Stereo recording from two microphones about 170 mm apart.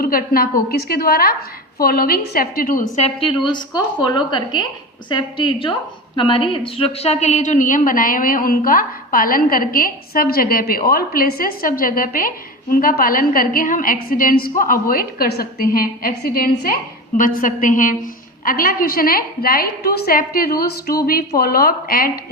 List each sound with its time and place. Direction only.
0.0 s a woman's voice: 60° left (ahead or behind)
2.9 s a woman's voice: 35° left (ahead or behind); by 22.2 s 60° left (ahead or behind)